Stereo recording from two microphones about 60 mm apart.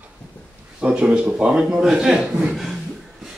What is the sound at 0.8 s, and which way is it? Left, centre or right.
Speech, centre.